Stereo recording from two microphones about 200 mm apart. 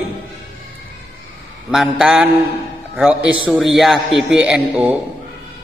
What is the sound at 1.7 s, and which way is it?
A man's voice, centre (ahead or behind).